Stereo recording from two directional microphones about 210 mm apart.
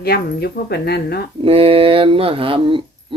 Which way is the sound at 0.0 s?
50° left (ahead or behind).